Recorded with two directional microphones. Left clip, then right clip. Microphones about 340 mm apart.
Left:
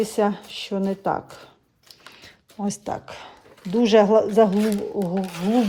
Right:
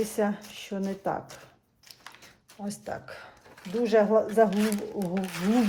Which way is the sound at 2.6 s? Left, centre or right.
Centre.